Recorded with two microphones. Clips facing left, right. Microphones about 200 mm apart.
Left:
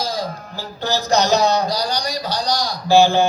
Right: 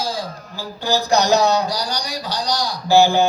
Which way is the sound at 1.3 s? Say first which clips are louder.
Right 2 dB; 15° left (ahead or behind).